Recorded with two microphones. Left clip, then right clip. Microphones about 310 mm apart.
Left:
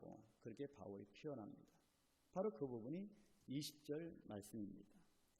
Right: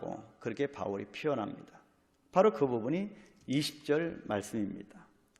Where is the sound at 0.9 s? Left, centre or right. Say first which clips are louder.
Right 19 dB; right.